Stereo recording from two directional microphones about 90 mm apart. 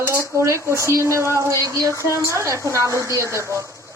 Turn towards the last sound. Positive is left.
turn(degrees=-35)  # may be behind; listen again after turning